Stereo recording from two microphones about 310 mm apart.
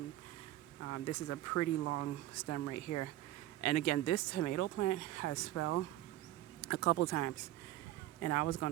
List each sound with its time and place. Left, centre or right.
0.9 s speech: left